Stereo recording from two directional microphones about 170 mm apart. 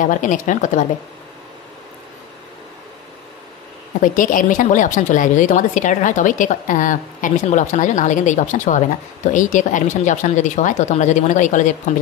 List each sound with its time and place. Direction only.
0.0 s a woman's voice: 50° left (ahead or behind)
4.0 s a woman's voice: 50° left (ahead or behind)